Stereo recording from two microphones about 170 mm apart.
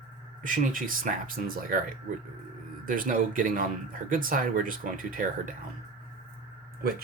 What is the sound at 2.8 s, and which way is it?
Speech, 55° right (ahead or behind).